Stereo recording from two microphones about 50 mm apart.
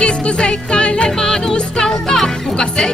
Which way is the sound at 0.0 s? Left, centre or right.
Left.